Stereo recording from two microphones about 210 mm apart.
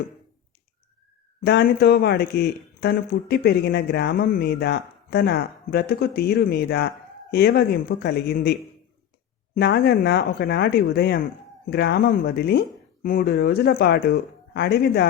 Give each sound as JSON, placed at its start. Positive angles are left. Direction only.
{"t": 1.4, "sound": "speech", "side_deg": 45}
{"t": 9.6, "sound": "speech", "side_deg": 50}